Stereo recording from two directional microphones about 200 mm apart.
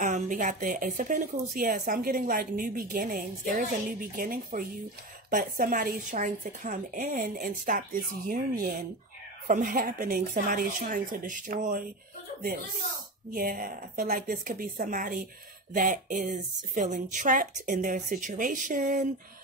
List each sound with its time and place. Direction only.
0.0 s a woman's voice: 40° right (ahead or behind)
13.3 s a woman's voice: 45° right (ahead or behind)